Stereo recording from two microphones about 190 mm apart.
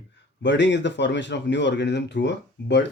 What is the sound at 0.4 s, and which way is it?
Speech, 70° left (ahead or behind).